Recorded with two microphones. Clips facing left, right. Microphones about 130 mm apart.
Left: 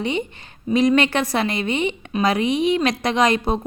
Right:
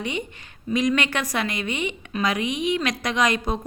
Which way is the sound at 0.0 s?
30° left (ahead or behind).